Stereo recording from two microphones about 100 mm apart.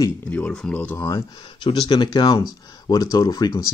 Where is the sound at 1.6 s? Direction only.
50° left (ahead or behind).